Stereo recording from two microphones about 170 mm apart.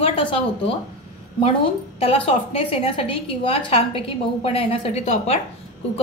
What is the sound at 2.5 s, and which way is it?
A woman's voice, 35° left (ahead or behind).